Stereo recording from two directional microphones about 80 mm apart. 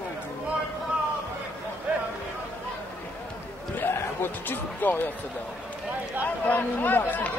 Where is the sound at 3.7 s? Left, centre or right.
Left.